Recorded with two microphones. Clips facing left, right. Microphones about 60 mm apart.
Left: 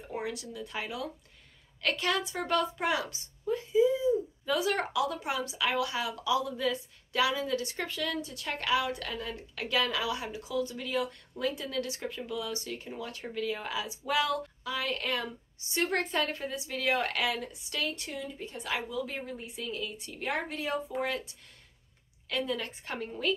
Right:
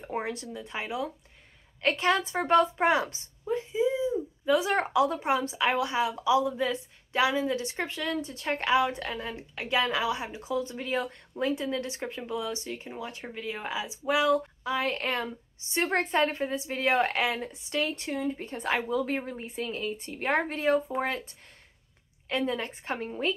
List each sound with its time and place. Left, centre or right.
0.1 s a woman's voice: right